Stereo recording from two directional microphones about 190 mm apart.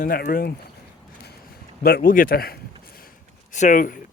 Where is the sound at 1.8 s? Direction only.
55° left (ahead or behind).